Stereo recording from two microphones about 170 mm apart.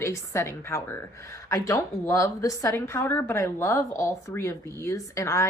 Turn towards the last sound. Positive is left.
turn(degrees=15)  # may be behind; listen again after turning